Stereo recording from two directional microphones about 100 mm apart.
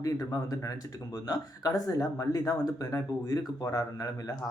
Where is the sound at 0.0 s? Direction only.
35° left (ahead or behind).